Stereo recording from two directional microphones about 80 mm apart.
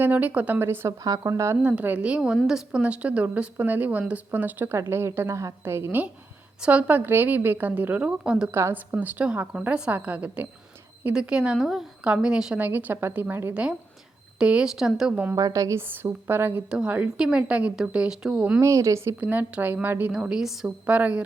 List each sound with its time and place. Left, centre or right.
0.0 s a woman's voice: right
1.0 s a woman's voice: right
1.6 s a woman's voice: right
6.6 s a woman's voice: centre
8.7 s a woman's voice: right
12.5 s a woman's voice: right; by 15.2 s centre
15.4 s a woman's voice: right
15.9 s a woman's voice: right
16.6 s a woman's voice: centre
18.6 s a woman's voice: right
19.2 s a woman's voice: right
20.1 s a woman's voice: centre
20.8 s a woman's voice: centre